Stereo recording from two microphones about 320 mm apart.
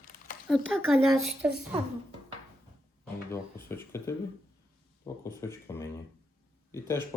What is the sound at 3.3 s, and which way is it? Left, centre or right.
Speech, centre.